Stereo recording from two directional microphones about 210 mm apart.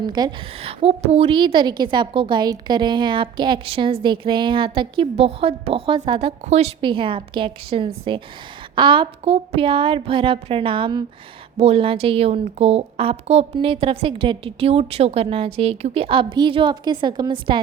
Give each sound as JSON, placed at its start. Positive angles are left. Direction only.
{"t": 0.0, "sound": "a woman's voice", "side_deg": -20}